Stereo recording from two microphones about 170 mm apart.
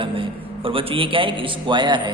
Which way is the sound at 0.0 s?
30° right (ahead or behind).